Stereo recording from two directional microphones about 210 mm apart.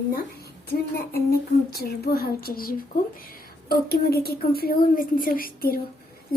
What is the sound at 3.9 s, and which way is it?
A child's voice, 50° left (ahead or behind).